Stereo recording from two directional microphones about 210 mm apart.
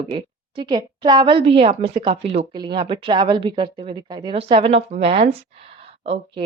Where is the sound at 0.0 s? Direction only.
25° right (ahead or behind).